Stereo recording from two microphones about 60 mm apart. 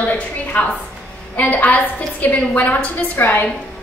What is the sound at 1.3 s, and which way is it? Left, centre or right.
A woman's voice, left.